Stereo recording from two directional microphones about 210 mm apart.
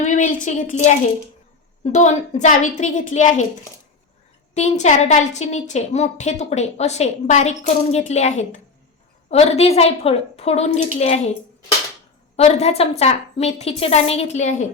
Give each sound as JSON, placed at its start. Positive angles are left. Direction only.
{"t": 0.0, "sound": "a woman's voice", "side_deg": 35}
{"t": 4.5, "sound": "a woman's voice", "side_deg": 30}
{"t": 12.4, "sound": "a woman's voice", "side_deg": 30}